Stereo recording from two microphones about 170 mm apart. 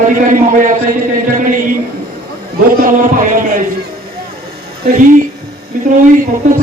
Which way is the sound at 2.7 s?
55° right (ahead or behind).